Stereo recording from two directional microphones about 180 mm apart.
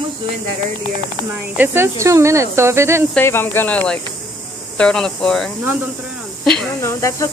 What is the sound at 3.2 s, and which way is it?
Speech, 10° left (ahead or behind).